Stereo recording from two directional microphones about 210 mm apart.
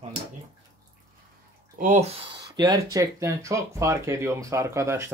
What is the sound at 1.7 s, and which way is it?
Speech, 35° right (ahead or behind).